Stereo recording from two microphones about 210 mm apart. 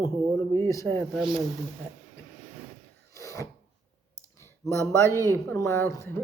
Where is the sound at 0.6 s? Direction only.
10° left (ahead or behind).